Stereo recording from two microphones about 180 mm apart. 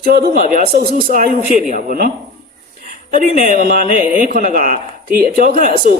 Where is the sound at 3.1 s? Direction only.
50° right (ahead or behind).